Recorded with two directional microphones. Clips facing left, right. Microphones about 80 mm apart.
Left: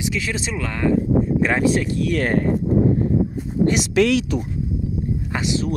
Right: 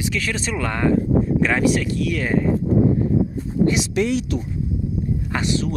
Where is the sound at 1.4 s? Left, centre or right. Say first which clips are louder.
Even; left.